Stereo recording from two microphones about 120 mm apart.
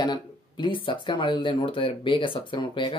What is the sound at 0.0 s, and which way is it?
Speech, 40° left (ahead or behind).